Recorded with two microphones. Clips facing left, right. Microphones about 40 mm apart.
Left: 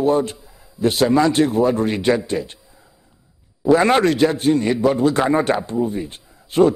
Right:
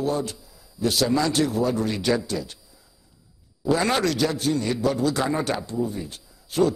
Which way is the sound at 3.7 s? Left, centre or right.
Left.